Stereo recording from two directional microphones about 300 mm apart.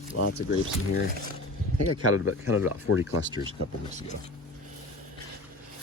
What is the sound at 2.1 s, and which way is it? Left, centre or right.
Speech, left.